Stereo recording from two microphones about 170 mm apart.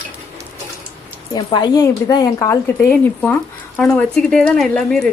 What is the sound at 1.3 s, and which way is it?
A woman's voice, 25° left (ahead or behind).